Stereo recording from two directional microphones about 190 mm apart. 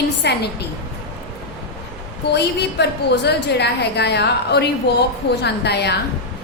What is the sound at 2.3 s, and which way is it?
A woman's voice, 60° left (ahead or behind).